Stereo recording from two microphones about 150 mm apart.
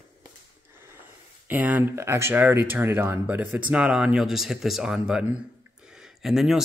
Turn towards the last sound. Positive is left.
turn(degrees=0)  # may be behind; listen again after turning